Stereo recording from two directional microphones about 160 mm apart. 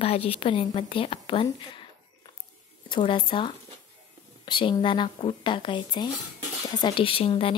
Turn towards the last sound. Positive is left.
turn(degrees=35)  # may be behind; listen again after turning